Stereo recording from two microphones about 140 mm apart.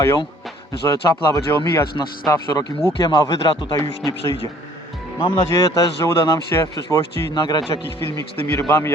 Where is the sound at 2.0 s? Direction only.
30° left (ahead or behind).